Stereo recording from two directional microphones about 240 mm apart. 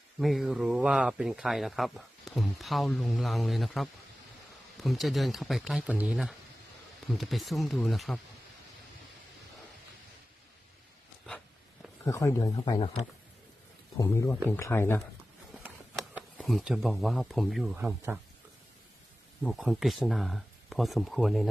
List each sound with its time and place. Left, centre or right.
0.2 s speech: centre
12.0 s speech: centre
13.9 s speech: centre
16.4 s speech: centre
19.4 s speech: centre